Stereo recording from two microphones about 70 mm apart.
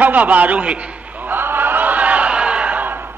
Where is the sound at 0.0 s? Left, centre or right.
Right.